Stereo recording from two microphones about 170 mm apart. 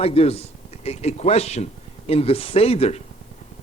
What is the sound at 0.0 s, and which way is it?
A man's voice, 35° left (ahead or behind).